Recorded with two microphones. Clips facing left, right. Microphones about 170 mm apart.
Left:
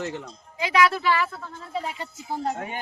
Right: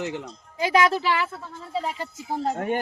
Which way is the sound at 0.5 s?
40° right (ahead or behind).